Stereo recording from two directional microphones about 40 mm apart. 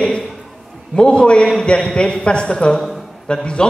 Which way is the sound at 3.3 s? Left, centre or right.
Left.